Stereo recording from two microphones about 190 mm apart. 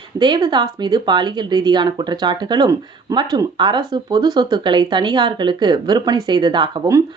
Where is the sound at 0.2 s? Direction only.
20° right (ahead or behind).